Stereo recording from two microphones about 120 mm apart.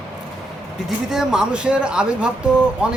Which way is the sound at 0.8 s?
5° right (ahead or behind).